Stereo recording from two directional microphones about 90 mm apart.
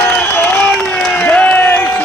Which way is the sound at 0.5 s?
5° left (ahead or behind).